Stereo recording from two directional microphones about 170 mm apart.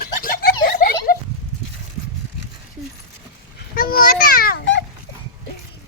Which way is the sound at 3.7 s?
60° left (ahead or behind).